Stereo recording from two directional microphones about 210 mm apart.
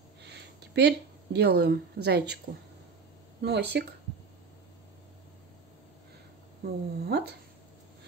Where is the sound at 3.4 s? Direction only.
50° right (ahead or behind).